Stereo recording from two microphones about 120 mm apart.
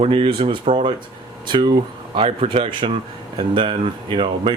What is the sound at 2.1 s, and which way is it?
Speech, 50° right (ahead or behind).